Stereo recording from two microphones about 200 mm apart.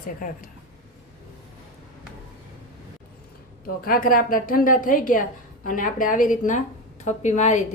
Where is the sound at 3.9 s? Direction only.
45° left (ahead or behind).